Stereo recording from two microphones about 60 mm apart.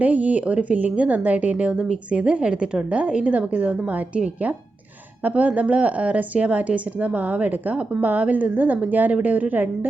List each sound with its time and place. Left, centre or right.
0.0 s a woman's voice: right